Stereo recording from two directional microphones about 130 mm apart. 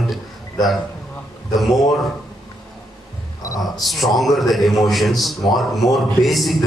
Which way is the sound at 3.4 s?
25° left (ahead or behind).